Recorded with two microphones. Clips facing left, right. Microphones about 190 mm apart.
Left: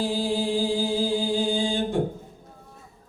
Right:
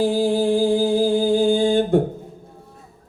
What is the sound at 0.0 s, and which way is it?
Music, 55° right (ahead or behind).